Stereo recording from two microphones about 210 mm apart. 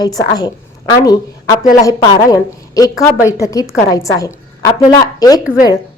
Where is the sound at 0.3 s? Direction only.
20° left (ahead or behind).